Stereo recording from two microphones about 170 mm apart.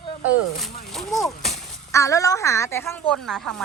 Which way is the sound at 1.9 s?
20° left (ahead or behind).